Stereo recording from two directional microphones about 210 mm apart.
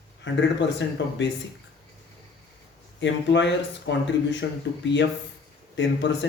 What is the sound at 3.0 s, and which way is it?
Speech, 60° left (ahead or behind).